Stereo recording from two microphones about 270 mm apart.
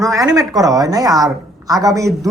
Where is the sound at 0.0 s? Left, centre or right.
Centre.